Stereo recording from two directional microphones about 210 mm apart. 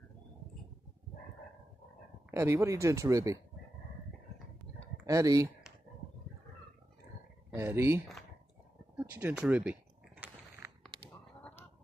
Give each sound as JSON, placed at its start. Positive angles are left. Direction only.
{"t": 2.3, "sound": "speech", "side_deg": -15}
{"t": 5.0, "sound": "speech", "side_deg": -15}
{"t": 7.5, "sound": "speech", "side_deg": -10}
{"t": 10.9, "sound": "a sound", "side_deg": -25}